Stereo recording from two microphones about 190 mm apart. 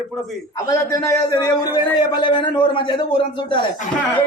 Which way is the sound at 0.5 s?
20° left (ahead or behind).